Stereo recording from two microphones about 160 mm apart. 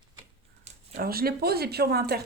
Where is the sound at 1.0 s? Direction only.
70° right (ahead or behind).